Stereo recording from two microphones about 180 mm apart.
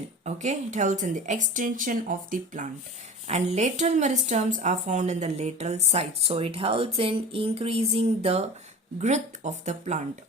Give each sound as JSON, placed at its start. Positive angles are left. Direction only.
{"t": 0.3, "sound": "a woman's voice", "side_deg": -40}